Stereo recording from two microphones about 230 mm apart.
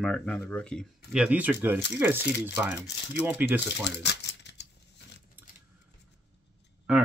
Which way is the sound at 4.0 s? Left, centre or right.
Left.